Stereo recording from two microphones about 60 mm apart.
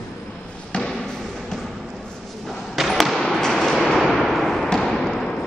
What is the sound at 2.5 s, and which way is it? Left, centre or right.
Arrow, centre.